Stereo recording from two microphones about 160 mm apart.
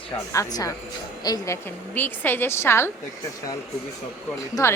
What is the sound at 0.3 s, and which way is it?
A woman's voice, 20° left (ahead or behind).